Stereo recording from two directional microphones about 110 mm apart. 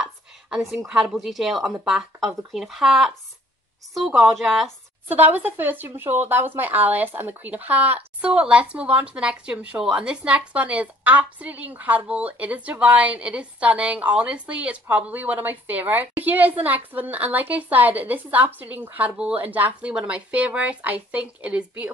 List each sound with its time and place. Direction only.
0.0 s a sound: 5° right (ahead or behind)
0.8 s speech: 5° right (ahead or behind)
5.0 s speech: 15° right (ahead or behind)